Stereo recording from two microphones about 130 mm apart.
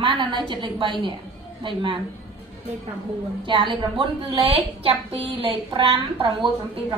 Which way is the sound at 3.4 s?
40° right (ahead or behind).